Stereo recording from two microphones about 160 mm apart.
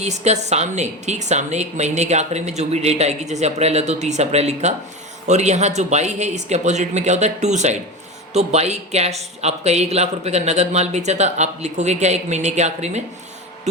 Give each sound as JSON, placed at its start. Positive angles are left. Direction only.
{"t": 0.0, "sound": "a woman's voice", "side_deg": -45}